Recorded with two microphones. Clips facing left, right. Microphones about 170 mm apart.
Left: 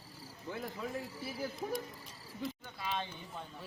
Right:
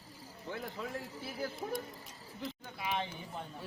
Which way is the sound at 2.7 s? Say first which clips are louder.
Right 4 dB; 15° right (ahead or behind).